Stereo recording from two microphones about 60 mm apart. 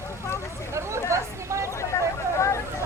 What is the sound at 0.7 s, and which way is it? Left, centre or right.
Chatter, right.